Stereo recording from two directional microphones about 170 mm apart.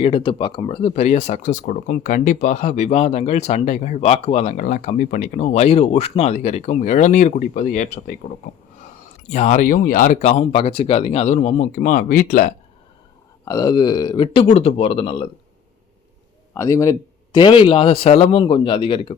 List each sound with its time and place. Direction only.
0.0 s speech: 30° left (ahead or behind); by 8.1 s 50° left (ahead or behind)
9.3 s speech: 45° left (ahead or behind)
13.4 s speech: 20° left (ahead or behind)
14.4 s speech: 40° left (ahead or behind)
16.6 s speech: 20° left (ahead or behind)